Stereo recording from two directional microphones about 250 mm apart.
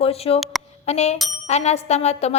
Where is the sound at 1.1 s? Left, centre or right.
Centre.